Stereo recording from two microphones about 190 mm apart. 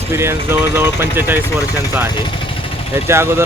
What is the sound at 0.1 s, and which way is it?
Speech, 15° right (ahead or behind).